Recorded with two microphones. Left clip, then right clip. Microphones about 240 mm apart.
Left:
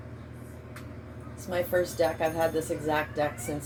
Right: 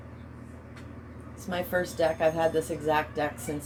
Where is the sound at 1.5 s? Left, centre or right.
Right.